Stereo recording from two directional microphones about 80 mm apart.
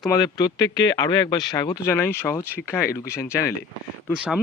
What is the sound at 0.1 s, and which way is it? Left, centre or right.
Speech, left.